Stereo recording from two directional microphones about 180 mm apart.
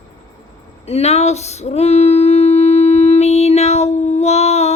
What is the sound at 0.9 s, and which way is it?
Female singing, 35° left (ahead or behind).